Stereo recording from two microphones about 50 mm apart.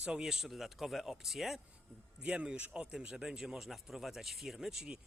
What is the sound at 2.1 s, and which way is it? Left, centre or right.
Speech, centre.